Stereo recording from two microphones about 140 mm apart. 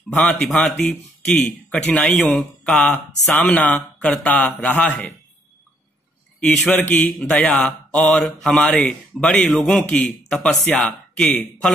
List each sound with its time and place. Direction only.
0.1 s speech: 10° left (ahead or behind)
6.7 s speech: 10° left (ahead or behind)